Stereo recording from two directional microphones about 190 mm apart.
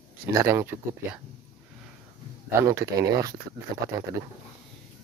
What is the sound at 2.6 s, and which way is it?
Speech, 15° right (ahead or behind).